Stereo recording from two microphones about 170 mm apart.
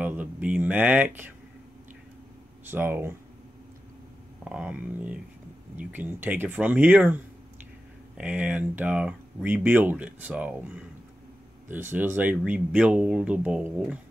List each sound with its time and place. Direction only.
0.0 s speech: 10° right (ahead or behind)
2.6 s speech: 10° right (ahead or behind)
4.5 s speech: 5° right (ahead or behind)
8.2 s speech: 10° right (ahead or behind)